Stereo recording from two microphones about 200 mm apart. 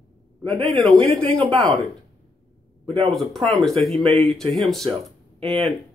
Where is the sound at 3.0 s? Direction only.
Centre (ahead or behind).